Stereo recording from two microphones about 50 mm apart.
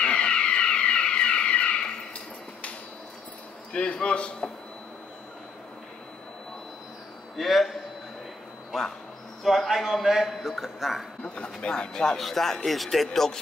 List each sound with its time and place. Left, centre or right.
0.0 s vehicle: centre
3.7 s a man's voice: left
7.3 s a man's voice: centre
9.4 s a man's voice: centre
11.2 s a man's voice: left; by 13.4 s centre